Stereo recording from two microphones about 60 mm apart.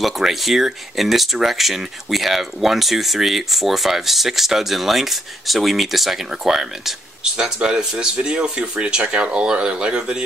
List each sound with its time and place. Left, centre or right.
0.0 s speech: centre